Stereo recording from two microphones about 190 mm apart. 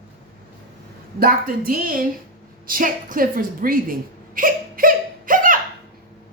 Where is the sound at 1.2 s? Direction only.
45° right (ahead or behind).